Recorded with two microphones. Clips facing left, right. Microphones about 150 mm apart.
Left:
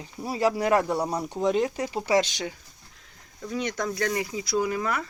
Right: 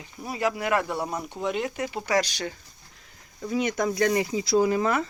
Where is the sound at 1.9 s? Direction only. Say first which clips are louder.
Left 3 dB; 25° left (ahead or behind).